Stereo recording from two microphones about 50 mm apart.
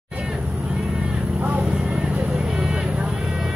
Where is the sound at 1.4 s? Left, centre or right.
Right.